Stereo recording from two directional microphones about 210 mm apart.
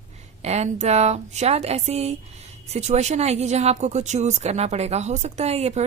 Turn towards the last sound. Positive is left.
turn(degrees=-30)  # may be behind; listen again after turning